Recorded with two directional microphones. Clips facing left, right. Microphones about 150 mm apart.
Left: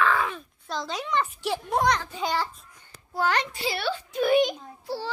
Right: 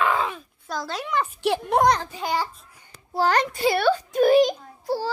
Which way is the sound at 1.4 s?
65° right (ahead or behind).